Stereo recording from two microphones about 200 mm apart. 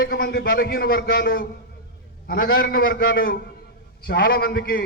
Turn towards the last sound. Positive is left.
turn(degrees=50)  # may be behind; listen again after turning